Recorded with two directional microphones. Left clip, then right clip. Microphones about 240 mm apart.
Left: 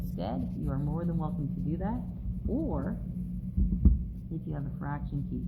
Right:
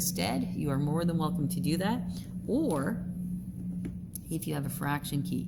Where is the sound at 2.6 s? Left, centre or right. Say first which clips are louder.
Right 5 dB; right.